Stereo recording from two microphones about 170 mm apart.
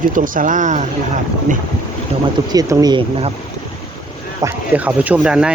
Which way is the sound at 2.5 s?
20° right (ahead or behind).